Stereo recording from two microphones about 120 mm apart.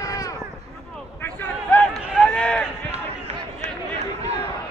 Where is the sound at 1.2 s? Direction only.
15° left (ahead or behind).